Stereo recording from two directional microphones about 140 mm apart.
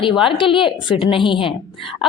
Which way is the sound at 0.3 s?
35° left (ahead or behind).